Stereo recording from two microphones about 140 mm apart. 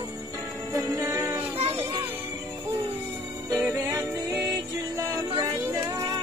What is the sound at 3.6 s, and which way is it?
Music, 20° right (ahead or behind).